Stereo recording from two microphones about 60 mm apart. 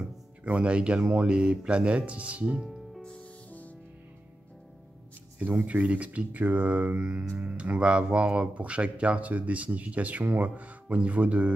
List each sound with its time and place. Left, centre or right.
0.4 s speech: right
2.6 s music: centre
3.0 s music: centre
5.4 s speech: right